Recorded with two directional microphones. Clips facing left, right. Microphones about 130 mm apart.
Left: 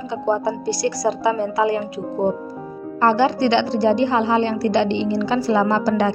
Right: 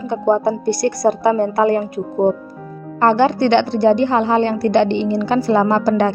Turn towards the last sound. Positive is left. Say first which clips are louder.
# right 3 dB
turn(degrees=-55)  # may be behind; listen again after turning